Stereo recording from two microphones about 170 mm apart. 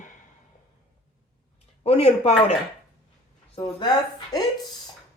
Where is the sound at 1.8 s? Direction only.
35° left (ahead or behind).